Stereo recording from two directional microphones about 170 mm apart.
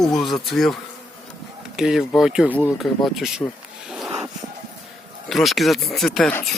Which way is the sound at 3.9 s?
5° right (ahead or behind).